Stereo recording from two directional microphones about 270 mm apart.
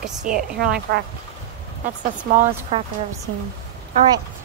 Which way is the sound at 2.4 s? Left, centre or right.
Right.